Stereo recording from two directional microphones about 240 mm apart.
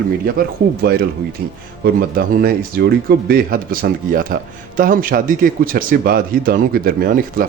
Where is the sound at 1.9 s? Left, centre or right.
Right.